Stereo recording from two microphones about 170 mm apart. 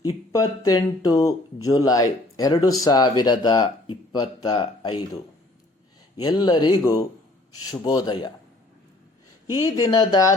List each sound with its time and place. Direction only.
0.0 s speech: 20° left (ahead or behind)
6.2 s speech: 25° left (ahead or behind)
9.6 s speech: 20° left (ahead or behind)